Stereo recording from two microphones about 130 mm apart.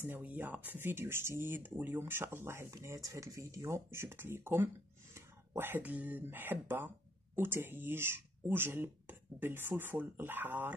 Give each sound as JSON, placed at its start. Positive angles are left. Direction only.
{"t": 0.0, "sound": "speech", "side_deg": -15}